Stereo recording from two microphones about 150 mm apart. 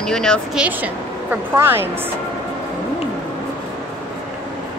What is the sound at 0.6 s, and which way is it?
Speech, 10° right (ahead or behind).